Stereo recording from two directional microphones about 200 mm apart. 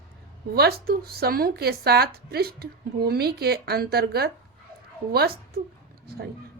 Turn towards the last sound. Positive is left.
turn(degrees=-50)  # may be behind; listen again after turning